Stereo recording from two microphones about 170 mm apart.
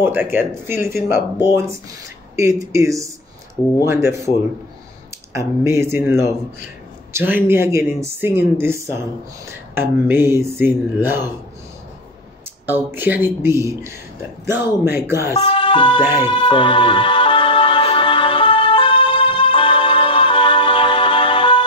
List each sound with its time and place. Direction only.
0.0 s speech: 10° right (ahead or behind)
2.3 s speech: 20° right (ahead or behind)
5.3 s speech: 15° right (ahead or behind)
12.6 s speech: 10° right (ahead or behind)
15.4 s speech: 30° left (ahead or behind)
16.3 s music: 30° left (ahead or behind)